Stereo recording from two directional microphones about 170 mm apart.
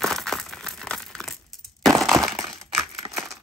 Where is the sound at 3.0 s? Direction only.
25° right (ahead or behind).